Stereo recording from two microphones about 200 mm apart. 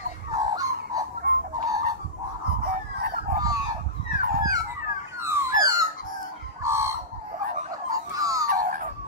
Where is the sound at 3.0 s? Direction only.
45° right (ahead or behind).